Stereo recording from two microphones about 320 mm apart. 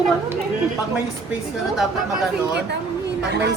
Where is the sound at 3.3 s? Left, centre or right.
Right.